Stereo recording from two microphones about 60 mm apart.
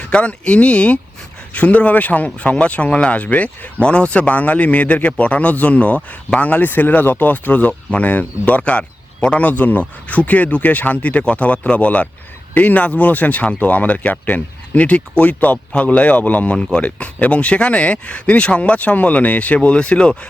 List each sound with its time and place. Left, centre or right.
0.0 s speech: left